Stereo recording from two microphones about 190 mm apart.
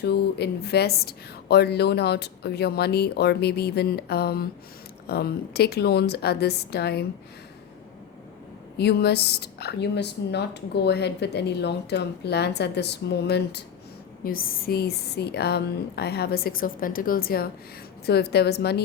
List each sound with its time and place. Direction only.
0.0 s a woman's voice: 60° left (ahead or behind)
8.8 s a woman's voice: 60° left (ahead or behind)
14.3 s a woman's voice: 50° left (ahead or behind)